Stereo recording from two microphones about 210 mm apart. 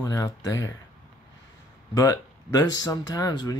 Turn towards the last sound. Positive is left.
turn(degrees=20)  # may be behind; listen again after turning